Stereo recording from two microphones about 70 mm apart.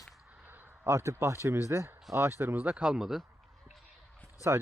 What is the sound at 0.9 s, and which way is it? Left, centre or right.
Speech, right.